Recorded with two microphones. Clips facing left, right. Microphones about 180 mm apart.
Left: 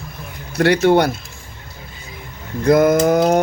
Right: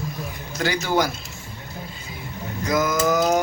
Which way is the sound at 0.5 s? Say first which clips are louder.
Left 9 dB; 65° left (ahead or behind).